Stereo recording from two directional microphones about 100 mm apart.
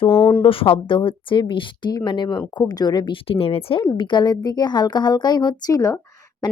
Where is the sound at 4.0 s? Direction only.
50° left (ahead or behind).